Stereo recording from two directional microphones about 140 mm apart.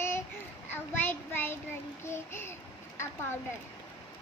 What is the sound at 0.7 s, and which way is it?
A child's voice, 15° left (ahead or behind).